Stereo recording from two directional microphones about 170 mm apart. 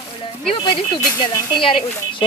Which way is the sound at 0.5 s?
30° left (ahead or behind).